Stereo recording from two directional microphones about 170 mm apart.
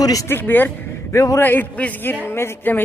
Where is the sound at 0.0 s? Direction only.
20° left (ahead or behind).